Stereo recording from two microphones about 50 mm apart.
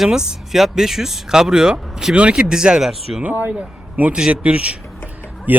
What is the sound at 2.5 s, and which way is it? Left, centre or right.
Speech, centre.